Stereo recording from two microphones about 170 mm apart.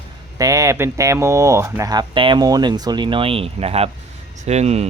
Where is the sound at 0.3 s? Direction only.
20° right (ahead or behind).